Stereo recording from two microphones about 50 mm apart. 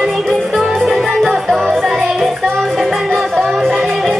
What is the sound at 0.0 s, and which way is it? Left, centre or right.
Music, centre.